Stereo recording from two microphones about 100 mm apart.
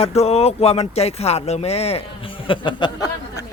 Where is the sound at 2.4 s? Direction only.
60° left (ahead or behind).